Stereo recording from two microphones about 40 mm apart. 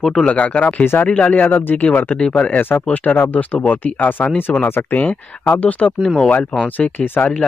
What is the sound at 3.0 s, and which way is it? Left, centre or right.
Speech, left.